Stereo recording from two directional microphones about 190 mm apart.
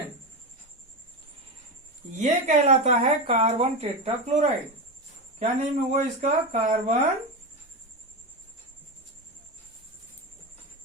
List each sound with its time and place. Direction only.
2.2 s speech: 35° right (ahead or behind)